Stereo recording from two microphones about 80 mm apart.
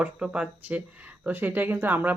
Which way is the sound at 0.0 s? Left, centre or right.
Centre.